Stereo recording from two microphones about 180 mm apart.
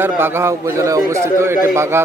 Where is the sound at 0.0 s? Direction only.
15° right (ahead or behind).